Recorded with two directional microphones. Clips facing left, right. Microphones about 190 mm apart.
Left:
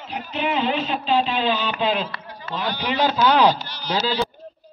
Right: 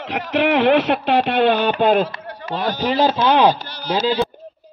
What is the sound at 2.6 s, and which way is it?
Speech, 40° right (ahead or behind).